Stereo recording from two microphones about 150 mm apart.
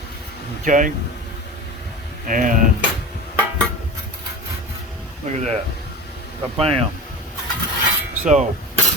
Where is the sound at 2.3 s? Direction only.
65° right (ahead or behind).